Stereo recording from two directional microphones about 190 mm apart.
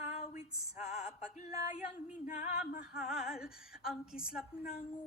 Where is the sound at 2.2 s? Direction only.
40° left (ahead or behind).